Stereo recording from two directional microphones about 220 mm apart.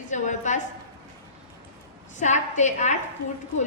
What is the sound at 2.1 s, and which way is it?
Speech, 35° left (ahead or behind).